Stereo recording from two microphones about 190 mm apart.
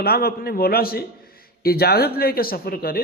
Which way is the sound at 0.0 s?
55° left (ahead or behind).